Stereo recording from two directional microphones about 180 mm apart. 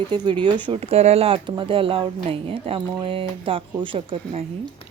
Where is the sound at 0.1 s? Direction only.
25° right (ahead or behind).